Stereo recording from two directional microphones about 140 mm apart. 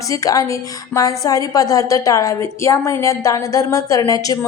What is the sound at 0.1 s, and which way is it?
A woman's voice, 25° left (ahead or behind).